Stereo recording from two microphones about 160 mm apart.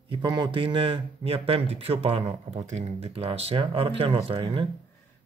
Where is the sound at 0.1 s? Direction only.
25° right (ahead or behind).